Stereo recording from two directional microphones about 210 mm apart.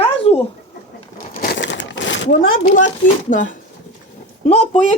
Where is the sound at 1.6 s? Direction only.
60° left (ahead or behind).